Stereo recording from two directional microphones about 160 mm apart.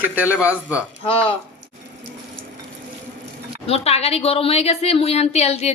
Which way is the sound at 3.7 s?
40° left (ahead or behind).